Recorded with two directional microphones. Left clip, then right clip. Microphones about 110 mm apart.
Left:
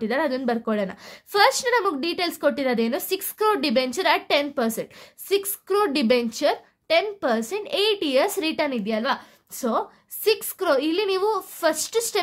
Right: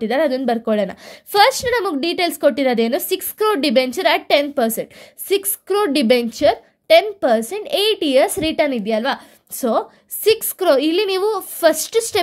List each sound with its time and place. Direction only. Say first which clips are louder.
0.0 s a woman's voice: right 6 dB; 25° right (ahead or behind)